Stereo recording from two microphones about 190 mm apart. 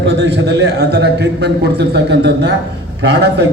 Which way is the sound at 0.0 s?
70° right (ahead or behind).